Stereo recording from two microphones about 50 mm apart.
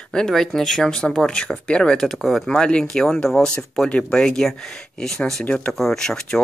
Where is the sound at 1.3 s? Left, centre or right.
Left.